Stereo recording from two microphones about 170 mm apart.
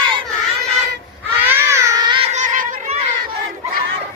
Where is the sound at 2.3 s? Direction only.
45° right (ahead or behind).